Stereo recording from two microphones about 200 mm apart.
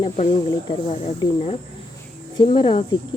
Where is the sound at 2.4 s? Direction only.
25° left (ahead or behind).